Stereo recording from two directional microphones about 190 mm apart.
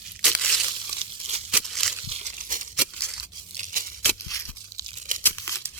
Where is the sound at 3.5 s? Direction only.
45° right (ahead or behind).